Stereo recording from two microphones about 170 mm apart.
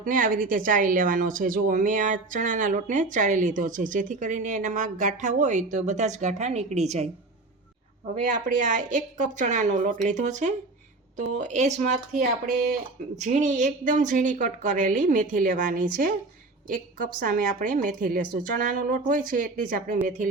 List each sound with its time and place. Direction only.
0.0 s a woman's voice: 55° right (ahead or behind)
8.1 s a woman's voice: 50° right (ahead or behind)